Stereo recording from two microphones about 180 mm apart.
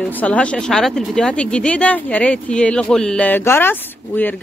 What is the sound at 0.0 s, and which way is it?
Speech, 10° left (ahead or behind).